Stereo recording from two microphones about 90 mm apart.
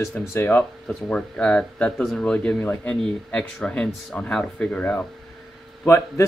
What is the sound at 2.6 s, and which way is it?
Speech, 20° left (ahead or behind).